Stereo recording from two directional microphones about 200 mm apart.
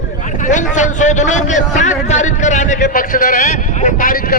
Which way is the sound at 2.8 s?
45° left (ahead or behind).